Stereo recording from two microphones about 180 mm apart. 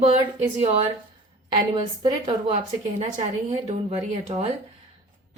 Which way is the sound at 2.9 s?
40° right (ahead or behind).